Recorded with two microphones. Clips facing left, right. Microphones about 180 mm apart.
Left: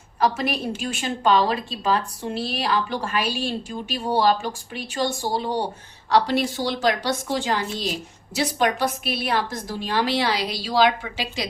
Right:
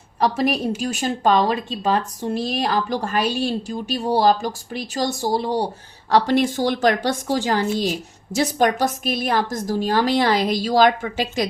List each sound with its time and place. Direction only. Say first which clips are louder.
0.8 s a woman's voice: right 4 dB; 45° right (ahead or behind)